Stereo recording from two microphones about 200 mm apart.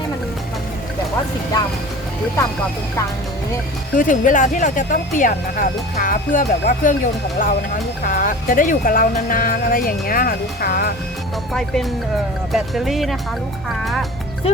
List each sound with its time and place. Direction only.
3.9 s speech: 40° left (ahead or behind)
11.5 s speech: centre (ahead or behind)